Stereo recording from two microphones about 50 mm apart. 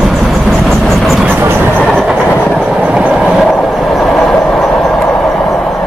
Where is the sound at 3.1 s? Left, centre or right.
Centre.